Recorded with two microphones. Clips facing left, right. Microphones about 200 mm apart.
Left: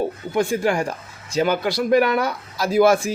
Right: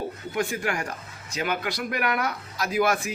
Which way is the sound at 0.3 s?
30° left (ahead or behind).